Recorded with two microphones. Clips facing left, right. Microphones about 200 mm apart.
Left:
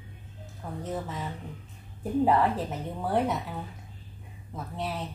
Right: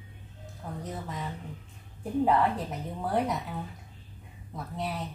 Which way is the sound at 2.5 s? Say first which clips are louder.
Left 2 dB; centre (ahead or behind).